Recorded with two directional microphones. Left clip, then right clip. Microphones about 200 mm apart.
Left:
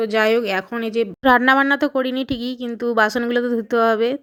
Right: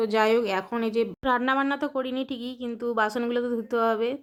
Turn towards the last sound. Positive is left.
turn(degrees=20)  # may be behind; listen again after turning